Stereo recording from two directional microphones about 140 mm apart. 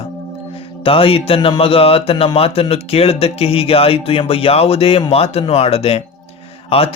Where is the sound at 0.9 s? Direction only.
40° left (ahead or behind).